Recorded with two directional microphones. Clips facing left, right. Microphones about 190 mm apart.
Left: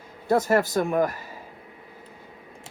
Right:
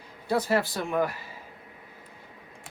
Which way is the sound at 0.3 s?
45° left (ahead or behind).